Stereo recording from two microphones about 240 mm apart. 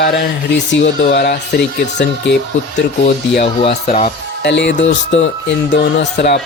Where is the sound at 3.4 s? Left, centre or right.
Left.